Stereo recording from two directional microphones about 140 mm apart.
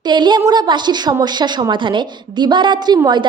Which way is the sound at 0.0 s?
30° right (ahead or behind).